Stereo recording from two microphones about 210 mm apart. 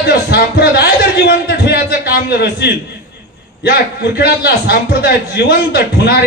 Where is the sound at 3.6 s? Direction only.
50° left (ahead or behind).